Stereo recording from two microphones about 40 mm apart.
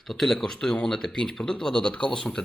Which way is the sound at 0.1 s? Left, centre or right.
Centre.